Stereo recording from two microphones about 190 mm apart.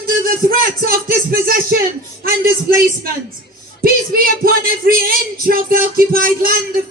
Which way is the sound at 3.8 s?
50° right (ahead or behind).